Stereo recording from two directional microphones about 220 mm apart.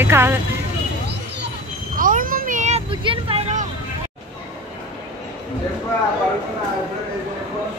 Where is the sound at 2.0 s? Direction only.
40° right (ahead or behind).